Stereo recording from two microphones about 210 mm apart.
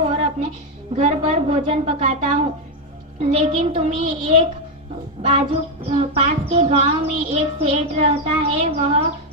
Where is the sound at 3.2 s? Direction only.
30° right (ahead or behind).